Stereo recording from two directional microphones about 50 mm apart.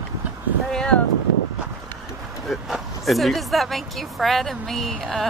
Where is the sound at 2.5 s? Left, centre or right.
Centre.